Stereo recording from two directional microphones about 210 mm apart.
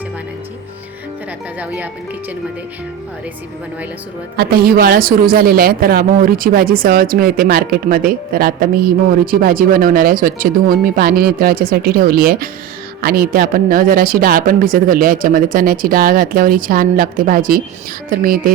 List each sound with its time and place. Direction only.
1.5 s speech: 5° right (ahead or behind)
4.4 s a woman's voice: 45° right (ahead or behind)